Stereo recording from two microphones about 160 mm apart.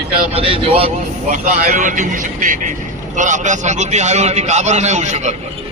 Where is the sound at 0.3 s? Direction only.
35° right (ahead or behind).